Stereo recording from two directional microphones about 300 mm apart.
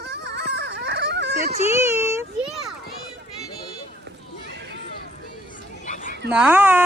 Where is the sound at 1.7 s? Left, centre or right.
Centre.